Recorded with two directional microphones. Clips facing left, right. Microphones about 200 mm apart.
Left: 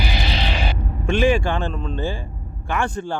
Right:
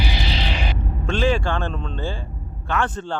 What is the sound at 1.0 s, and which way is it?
Speech, 15° left (ahead or behind).